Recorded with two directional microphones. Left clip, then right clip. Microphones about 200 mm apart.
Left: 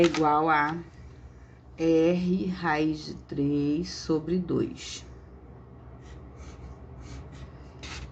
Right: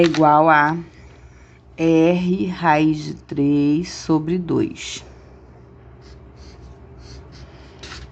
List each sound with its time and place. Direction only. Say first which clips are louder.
0.2 s speech: right 10 dB; 45° right (ahead or behind)
1.7 s speech: right 7 dB; 45° right (ahead or behind)